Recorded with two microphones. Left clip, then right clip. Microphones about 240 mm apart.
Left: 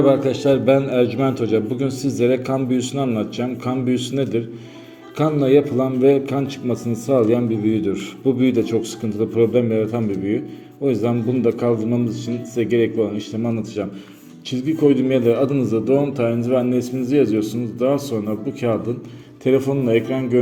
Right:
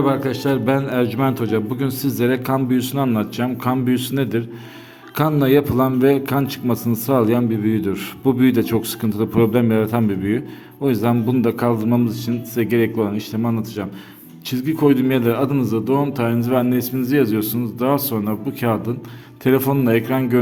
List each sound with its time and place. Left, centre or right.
0.0 s a man's voice: centre
19.5 s a man's voice: right